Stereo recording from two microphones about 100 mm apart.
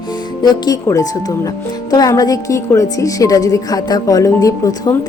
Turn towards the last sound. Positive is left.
turn(degrees=35)  # may be behind; listen again after turning